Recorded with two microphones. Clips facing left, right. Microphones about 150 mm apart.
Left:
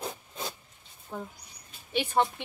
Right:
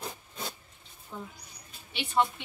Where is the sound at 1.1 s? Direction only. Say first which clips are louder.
Left 3 dB; 55° left (ahead or behind).